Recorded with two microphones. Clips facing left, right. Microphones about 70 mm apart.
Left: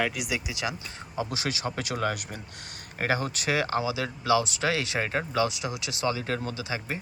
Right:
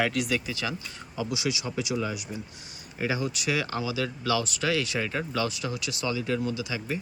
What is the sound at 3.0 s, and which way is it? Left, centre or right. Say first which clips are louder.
Speech: left 1 dB; left.